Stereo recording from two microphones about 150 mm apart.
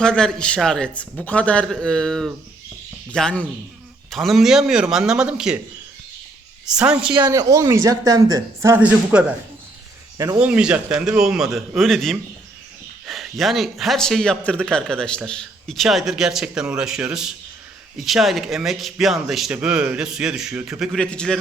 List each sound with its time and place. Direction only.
0.0 s a man's voice: 5° left (ahead or behind)
6.7 s a woman's voice: 5° right (ahead or behind)
7.2 s speech: 25° right (ahead or behind)
9.1 s a woman's voice: 5° right (ahead or behind)
10.2 s speech: 25° right (ahead or behind)
10.4 s a man's voice: 10° right (ahead or behind)